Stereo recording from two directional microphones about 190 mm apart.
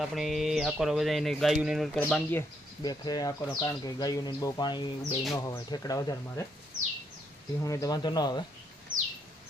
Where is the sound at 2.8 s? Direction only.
20° left (ahead or behind).